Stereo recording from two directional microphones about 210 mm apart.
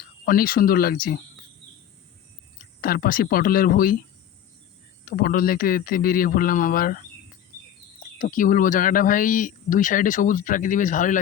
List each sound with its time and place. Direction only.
0.3 s a man's voice: 45° left (ahead or behind)
2.8 s a man's voice: 45° left (ahead or behind)
5.0 s a man's voice: 45° left (ahead or behind)
8.2 s speech: 40° left (ahead or behind)